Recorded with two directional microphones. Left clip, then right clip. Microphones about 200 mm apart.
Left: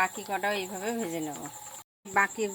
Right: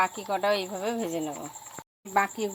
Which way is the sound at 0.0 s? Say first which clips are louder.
Right 3 dB; 20° right (ahead or behind).